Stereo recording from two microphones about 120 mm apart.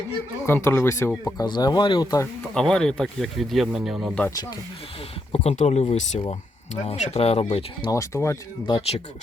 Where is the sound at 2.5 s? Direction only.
5° left (ahead or behind).